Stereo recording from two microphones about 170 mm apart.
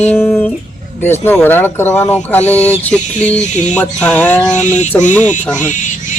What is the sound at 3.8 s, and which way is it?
Speech, 5° left (ahead or behind).